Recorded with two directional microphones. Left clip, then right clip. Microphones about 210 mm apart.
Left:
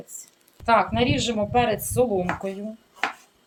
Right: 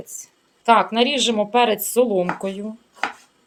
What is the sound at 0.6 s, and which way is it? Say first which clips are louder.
Speech: right 4 dB; 50° right (ahead or behind).